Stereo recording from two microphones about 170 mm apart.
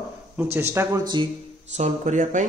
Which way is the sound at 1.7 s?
45° right (ahead or behind).